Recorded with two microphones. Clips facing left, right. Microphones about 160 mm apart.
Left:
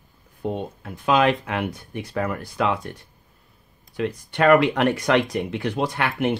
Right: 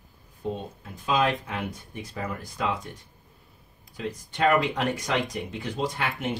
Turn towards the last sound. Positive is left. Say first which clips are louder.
# left 7 dB
turn(degrees=65)  # may be behind; listen again after turning